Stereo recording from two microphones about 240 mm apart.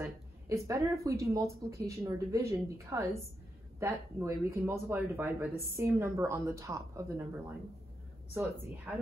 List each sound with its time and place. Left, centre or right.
0.0 s speech: centre